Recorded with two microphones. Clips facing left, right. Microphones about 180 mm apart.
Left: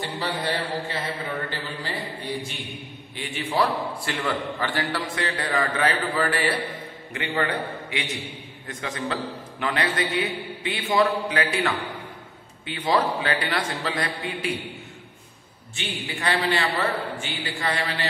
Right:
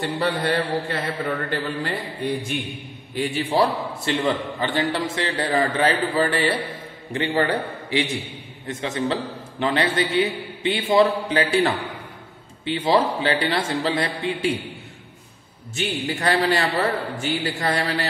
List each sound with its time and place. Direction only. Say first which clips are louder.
0.0 s speech: right 5 dB; 60° right (ahead or behind)
3.2 s a man's voice: right 4 dB; 35° right (ahead or behind)
15.7 s a man's voice: right 7 dB; 40° right (ahead or behind)